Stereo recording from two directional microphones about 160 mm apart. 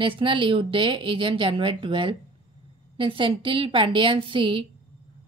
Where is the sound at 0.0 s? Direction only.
30° right (ahead or behind).